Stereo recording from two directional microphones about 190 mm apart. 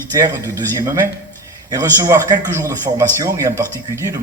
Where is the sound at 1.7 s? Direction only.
20° right (ahead or behind).